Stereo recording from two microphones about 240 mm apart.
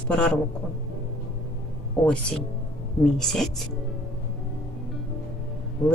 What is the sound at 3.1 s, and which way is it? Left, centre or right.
Speech, centre.